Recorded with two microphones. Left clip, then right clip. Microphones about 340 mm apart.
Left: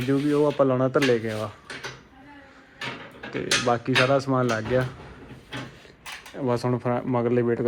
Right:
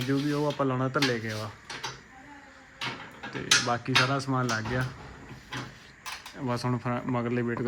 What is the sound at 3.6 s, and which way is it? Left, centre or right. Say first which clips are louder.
Speech: left 4 dB; left.